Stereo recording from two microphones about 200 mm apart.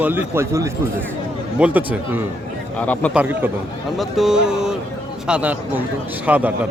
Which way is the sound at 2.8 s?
5° left (ahead or behind).